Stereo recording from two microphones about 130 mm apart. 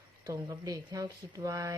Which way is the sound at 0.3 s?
30° right (ahead or behind).